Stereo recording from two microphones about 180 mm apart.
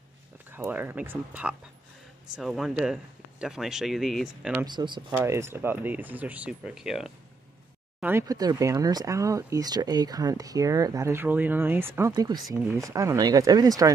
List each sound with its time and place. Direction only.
0.5 s speech: 10° right (ahead or behind)
4.6 s speech: 25° right (ahead or behind)
5.1 s speech: 15° right (ahead or behind)
8.0 s speech: 15° right (ahead or behind)